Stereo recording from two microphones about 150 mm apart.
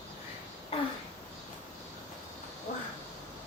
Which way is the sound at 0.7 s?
40° left (ahead or behind).